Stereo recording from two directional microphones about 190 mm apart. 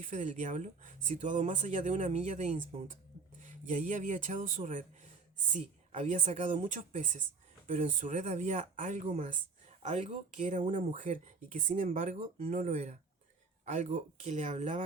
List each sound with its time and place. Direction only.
0.0 s speech: 40° right (ahead or behind)